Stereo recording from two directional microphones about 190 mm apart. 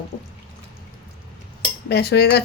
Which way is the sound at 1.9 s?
60° left (ahead or behind).